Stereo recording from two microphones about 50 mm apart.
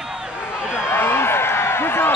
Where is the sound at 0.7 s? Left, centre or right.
Left.